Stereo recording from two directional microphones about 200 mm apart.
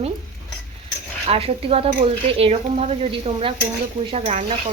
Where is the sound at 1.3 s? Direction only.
30° right (ahead or behind).